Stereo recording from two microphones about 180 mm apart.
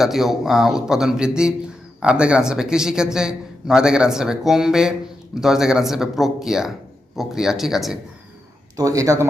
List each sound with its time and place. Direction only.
0.0 s speech: centre (ahead or behind)
8.7 s speech: 20° right (ahead or behind)